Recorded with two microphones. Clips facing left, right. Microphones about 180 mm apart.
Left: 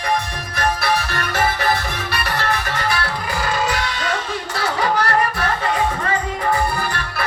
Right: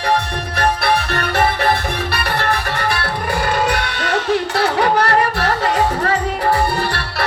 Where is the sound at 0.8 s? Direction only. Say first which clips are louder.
Right 3 dB; 60° right (ahead or behind).